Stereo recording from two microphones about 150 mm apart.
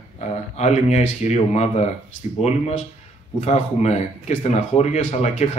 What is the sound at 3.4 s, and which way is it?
Speech, 45° left (ahead or behind).